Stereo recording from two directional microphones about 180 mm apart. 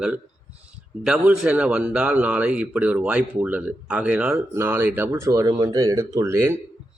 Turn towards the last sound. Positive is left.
turn(degrees=-15)  # may be behind; listen again after turning